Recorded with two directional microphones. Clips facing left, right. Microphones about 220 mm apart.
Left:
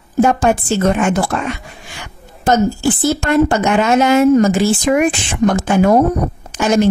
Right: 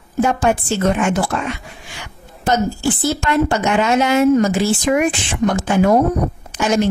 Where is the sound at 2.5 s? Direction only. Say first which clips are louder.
Left 4 dB; 45° left (ahead or behind).